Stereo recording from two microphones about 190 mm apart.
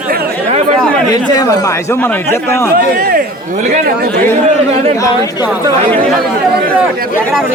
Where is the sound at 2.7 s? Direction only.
50° right (ahead or behind).